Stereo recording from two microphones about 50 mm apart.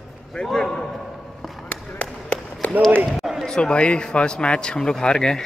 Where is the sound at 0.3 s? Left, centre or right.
Centre.